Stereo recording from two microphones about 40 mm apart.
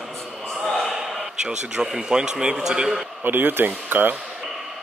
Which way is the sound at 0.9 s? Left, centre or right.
Centre.